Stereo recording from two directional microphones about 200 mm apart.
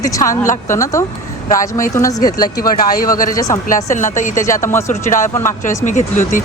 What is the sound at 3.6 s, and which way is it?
Speech, 40° left (ahead or behind).